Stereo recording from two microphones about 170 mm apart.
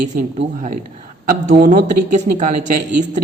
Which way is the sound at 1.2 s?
50° right (ahead or behind).